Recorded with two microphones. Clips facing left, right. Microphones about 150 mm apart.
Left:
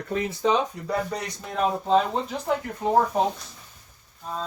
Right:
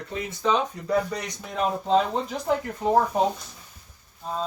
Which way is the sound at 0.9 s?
Centre (ahead or behind).